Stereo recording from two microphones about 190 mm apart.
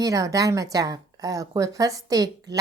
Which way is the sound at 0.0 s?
15° right (ahead or behind).